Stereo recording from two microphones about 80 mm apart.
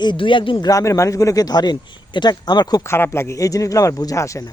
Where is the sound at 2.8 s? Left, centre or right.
Left.